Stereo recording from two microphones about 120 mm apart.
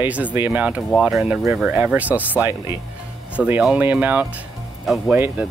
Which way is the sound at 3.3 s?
10° right (ahead or behind).